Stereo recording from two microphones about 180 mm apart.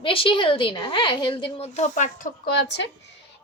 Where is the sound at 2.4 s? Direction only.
70° left (ahead or behind).